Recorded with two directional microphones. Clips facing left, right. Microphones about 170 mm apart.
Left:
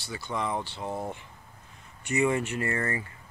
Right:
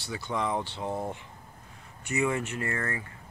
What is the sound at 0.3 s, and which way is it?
Speech, 5° right (ahead or behind).